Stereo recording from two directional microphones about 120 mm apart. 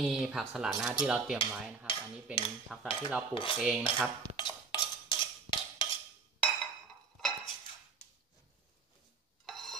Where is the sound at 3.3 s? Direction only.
45° left (ahead or behind).